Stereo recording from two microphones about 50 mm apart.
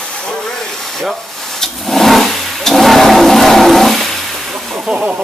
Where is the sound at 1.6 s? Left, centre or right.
Centre.